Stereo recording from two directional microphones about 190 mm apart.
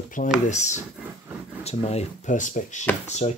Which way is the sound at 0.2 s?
45° left (ahead or behind).